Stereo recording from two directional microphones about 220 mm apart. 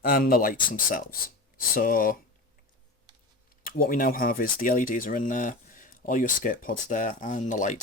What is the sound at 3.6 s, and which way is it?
Speech, 40° left (ahead or behind).